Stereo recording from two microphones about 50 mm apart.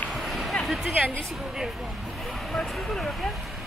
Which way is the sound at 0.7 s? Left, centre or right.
Centre.